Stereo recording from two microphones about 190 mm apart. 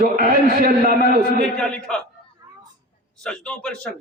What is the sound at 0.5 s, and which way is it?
Speech, 55° right (ahead or behind).